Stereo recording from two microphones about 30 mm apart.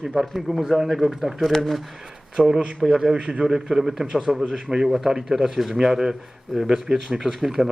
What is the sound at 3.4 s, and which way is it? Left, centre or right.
Speech, centre.